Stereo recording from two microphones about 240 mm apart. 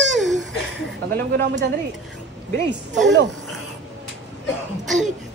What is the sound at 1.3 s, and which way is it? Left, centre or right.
A woman's voice, right.